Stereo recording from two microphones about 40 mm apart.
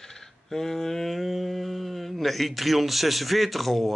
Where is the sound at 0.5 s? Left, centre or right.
Centre.